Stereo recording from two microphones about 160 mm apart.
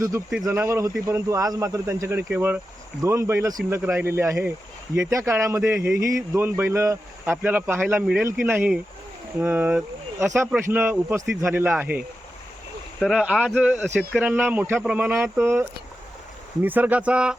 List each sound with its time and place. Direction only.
0.4 s a man's voice: 15° right (ahead or behind)
16.6 s a man's voice: 10° right (ahead or behind)